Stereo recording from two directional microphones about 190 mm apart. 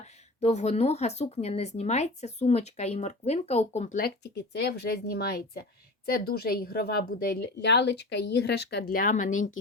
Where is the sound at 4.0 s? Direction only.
55° left (ahead or behind).